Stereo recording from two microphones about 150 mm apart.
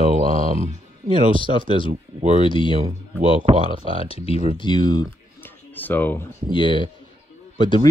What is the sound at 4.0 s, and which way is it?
Speech, 40° left (ahead or behind).